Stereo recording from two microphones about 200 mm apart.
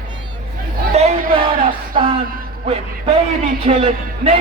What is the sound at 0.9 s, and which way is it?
Speech, 30° right (ahead or behind).